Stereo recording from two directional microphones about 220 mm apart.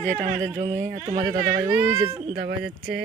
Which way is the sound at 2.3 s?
50° right (ahead or behind).